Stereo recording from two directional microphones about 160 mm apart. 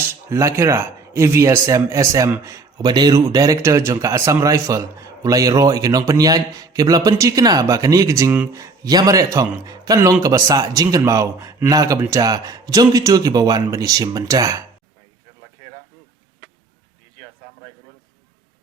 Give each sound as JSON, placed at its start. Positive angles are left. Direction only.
{"t": 0.1, "sound": "a man's voice", "side_deg": -20}